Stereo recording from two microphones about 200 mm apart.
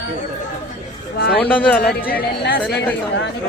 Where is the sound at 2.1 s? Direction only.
50° left (ahead or behind).